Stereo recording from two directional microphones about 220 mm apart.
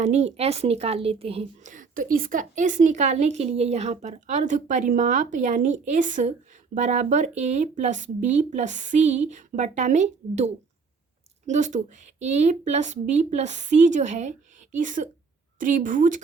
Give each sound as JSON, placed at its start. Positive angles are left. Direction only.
{"t": 0.0, "sound": "a woman's voice", "side_deg": -30}